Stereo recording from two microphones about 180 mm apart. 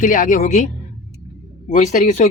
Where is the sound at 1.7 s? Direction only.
45° left (ahead or behind).